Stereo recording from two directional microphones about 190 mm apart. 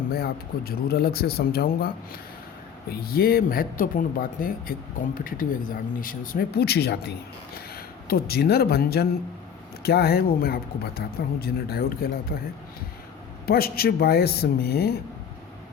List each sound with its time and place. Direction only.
0.1 s speech: 55° left (ahead or behind)
2.9 s a woman's voice: 50° left (ahead or behind)